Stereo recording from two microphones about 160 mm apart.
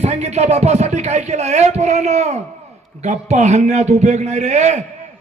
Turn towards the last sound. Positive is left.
turn(degrees=-45)  # may be behind; listen again after turning